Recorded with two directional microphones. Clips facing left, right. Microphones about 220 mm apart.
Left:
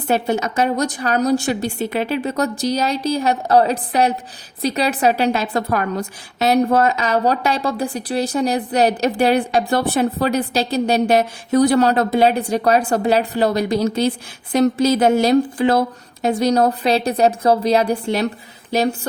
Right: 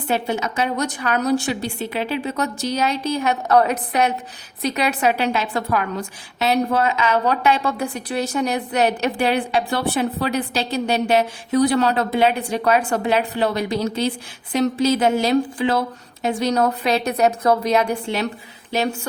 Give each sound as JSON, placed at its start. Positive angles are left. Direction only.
{"t": 0.1, "sound": "a woman's voice", "side_deg": 40}